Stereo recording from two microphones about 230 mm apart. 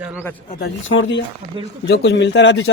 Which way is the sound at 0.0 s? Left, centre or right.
Centre.